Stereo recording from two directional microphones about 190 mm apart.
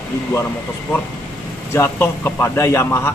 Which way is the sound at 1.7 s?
15° left (ahead or behind).